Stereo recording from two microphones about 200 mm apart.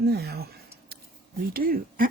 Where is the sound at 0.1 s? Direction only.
50° right (ahead or behind).